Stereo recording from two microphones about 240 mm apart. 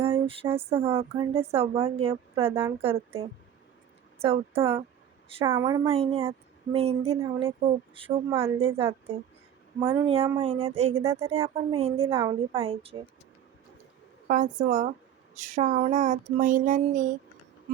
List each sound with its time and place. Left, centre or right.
0.0 s a sound: right
0.7 s a woman's voice: right
4.2 s a woman's voice: right
11.0 s a woman's voice: centre
14.3 s speech: right